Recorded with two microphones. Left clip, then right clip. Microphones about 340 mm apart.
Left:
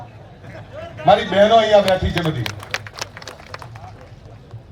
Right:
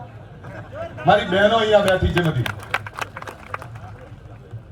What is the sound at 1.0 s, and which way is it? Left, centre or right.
Speech, left.